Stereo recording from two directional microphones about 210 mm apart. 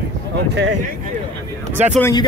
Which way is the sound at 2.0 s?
15° left (ahead or behind).